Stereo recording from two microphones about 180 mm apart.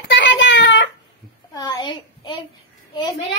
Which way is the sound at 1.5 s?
20° left (ahead or behind).